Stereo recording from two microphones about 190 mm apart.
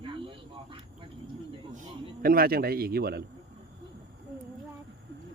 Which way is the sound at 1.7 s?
45° right (ahead or behind).